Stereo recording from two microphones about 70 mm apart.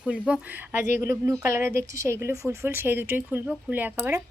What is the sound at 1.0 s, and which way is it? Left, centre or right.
A woman's voice, right.